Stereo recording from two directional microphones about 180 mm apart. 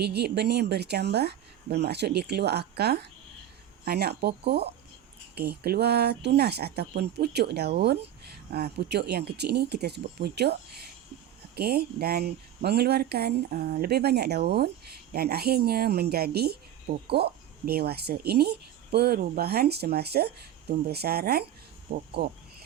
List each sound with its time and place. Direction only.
0.0 s speech: 65° right (ahead or behind)